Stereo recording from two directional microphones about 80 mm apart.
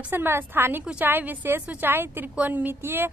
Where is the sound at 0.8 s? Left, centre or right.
Centre.